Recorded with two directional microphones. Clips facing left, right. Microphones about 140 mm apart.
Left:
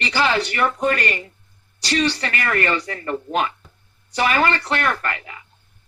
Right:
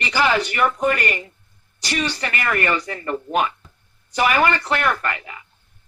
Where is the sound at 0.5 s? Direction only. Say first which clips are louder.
Right 1 dB; 15° right (ahead or behind).